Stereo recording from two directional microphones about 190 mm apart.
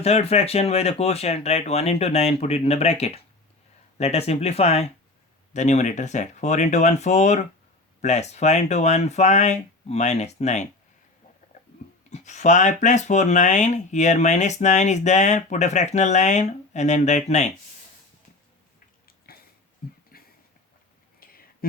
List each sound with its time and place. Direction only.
0.0 s speech: 35° left (ahead or behind)
12.1 s speech: 40° left (ahead or behind)
19.0 s a sound: 55° left (ahead or behind)